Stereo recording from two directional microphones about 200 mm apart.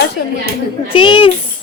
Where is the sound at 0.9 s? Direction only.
25° left (ahead or behind).